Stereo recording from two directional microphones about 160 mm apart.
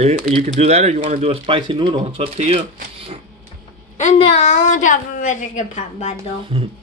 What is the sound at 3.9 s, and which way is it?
A woman's voice, 45° left (ahead or behind).